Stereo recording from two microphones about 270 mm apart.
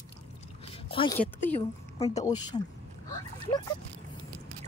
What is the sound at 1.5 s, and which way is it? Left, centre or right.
A woman's voice, left.